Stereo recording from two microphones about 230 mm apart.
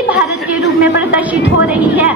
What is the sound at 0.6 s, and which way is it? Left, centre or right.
Speech, left.